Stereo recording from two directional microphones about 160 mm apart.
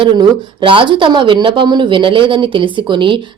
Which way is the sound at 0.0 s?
30° right (ahead or behind).